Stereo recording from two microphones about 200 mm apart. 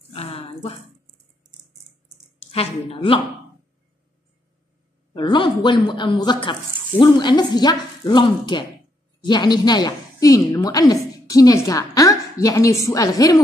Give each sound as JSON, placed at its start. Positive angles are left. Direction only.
{"t": 0.1, "sound": "a sound", "side_deg": 30}
{"t": 2.4, "sound": "speech", "side_deg": 30}
{"t": 5.1, "sound": "a woman's voice", "side_deg": 25}